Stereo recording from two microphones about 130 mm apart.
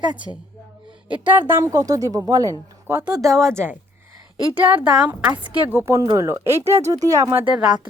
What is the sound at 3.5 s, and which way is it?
Speech, 15° right (ahead or behind).